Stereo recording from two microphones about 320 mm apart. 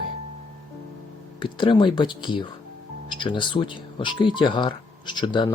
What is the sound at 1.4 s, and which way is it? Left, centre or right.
Speech, centre.